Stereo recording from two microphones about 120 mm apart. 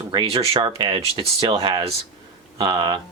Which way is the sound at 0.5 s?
45° right (ahead or behind).